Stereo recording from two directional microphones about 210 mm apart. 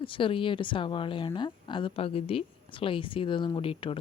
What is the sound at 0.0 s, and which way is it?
A woman's voice, 25° left (ahead or behind).